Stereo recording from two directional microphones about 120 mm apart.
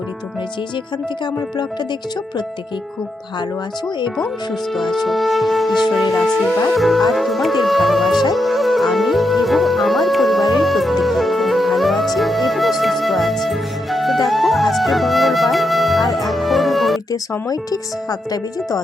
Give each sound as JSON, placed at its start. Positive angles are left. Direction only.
{"t": 4.7, "sound": "music", "side_deg": 0}
{"t": 17.1, "sound": "speech", "side_deg": 30}